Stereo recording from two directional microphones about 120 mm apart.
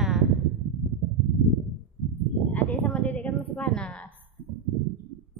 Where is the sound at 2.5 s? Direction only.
10° left (ahead or behind).